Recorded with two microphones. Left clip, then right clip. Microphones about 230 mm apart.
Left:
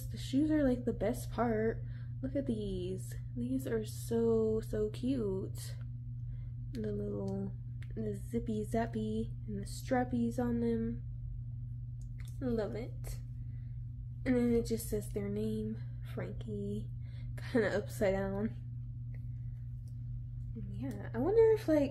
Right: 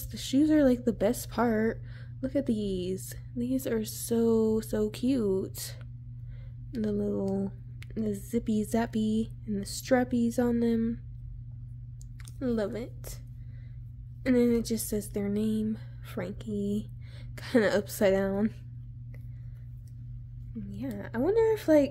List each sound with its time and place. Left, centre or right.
0.1 s speech: right
6.8 s speech: right
12.4 s speech: right
14.2 s speech: right
20.7 s speech: right